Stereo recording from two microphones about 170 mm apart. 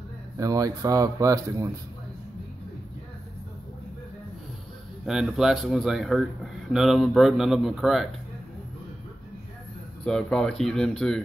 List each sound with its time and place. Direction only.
0.4 s speech: 20° right (ahead or behind)
5.0 s speech: 5° right (ahead or behind)
10.0 s speech: 5° left (ahead or behind)